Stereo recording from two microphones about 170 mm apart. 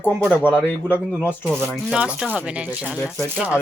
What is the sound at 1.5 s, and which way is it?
A woman's voice, centre (ahead or behind).